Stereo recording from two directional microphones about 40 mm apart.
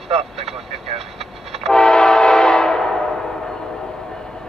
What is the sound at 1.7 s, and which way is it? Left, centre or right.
Train, centre.